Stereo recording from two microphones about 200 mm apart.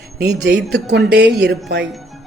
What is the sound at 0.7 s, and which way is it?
Speech, 55° right (ahead or behind).